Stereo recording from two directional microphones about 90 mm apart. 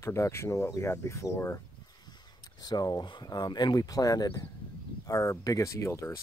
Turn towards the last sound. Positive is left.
turn(degrees=35)  # may be behind; listen again after turning